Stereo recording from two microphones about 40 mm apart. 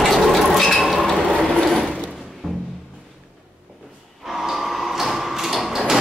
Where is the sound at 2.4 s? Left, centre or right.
Right.